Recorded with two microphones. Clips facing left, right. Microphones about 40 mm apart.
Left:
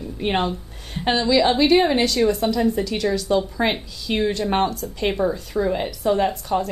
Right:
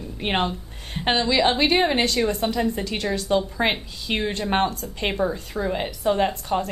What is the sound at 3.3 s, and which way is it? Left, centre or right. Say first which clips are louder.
Speech: left 1 dB; centre.